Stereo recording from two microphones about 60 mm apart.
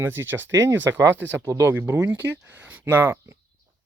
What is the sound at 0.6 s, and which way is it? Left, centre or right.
Speech, right.